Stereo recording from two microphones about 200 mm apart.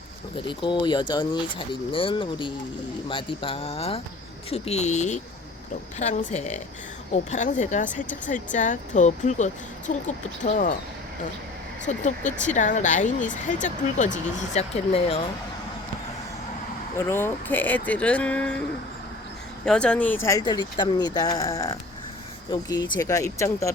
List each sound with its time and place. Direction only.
0.4 s speech: 25° left (ahead or behind)
11.9 s speech: 40° left (ahead or behind)
17.1 s speech: 10° left (ahead or behind)
19.6 s speech: 5° left (ahead or behind)